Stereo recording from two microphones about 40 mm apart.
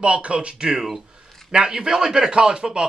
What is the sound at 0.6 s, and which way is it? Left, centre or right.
A man's voice, centre.